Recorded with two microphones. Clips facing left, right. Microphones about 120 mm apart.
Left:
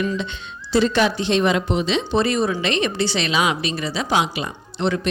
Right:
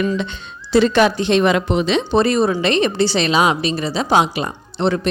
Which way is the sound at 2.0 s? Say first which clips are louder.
Right 5 dB; 40° right (ahead or behind).